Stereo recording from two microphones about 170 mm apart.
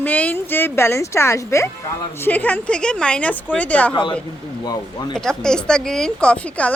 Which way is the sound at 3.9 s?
30° left (ahead or behind).